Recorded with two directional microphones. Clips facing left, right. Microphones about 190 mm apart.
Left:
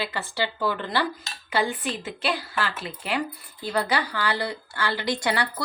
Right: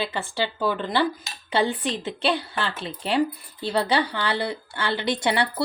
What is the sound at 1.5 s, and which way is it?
Speech, 30° right (ahead or behind).